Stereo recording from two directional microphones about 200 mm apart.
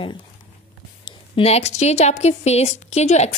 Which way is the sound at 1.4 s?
30° left (ahead or behind).